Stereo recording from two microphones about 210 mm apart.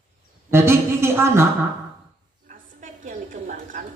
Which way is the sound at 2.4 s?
40° right (ahead or behind).